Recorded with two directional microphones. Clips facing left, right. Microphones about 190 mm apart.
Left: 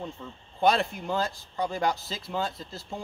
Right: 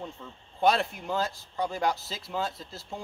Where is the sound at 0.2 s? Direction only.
Centre (ahead or behind).